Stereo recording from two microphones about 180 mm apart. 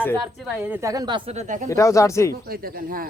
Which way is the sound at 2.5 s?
55° right (ahead or behind).